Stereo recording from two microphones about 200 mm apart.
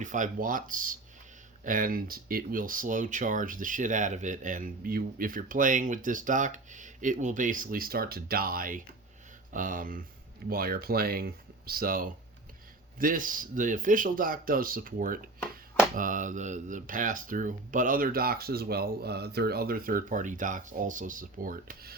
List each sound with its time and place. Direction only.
0.0 s speech: 40° right (ahead or behind)